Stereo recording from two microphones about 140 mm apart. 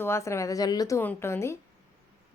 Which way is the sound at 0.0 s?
20° left (ahead or behind).